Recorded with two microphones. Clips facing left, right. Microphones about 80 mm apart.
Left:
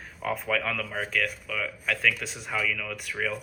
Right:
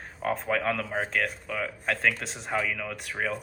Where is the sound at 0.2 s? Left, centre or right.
Right.